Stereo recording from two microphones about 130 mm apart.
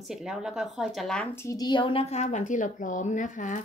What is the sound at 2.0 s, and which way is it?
Speech, 60° left (ahead or behind).